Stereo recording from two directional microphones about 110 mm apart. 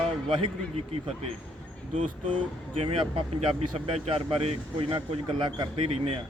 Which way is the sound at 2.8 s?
65° right (ahead or behind).